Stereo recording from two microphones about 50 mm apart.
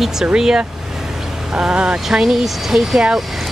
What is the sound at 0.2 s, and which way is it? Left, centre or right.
Speech, centre.